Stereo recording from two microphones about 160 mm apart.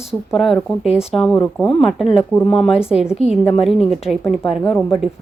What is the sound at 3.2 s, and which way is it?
Speech, 40° left (ahead or behind).